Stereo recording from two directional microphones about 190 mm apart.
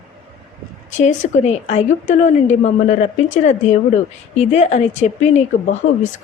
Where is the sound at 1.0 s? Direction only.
40° left (ahead or behind).